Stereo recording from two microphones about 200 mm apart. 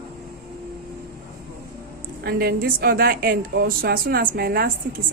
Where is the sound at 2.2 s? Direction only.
50° right (ahead or behind).